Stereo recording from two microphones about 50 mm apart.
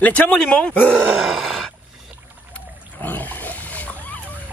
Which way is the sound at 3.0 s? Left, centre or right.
Left.